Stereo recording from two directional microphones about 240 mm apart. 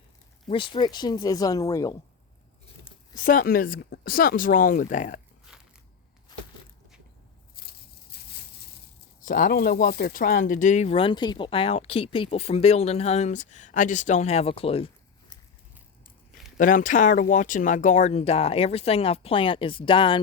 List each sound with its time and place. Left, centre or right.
0.4 s speech: left
3.2 s speech: left
7.5 s a sound: left
9.2 s speech: left
16.6 s speech: left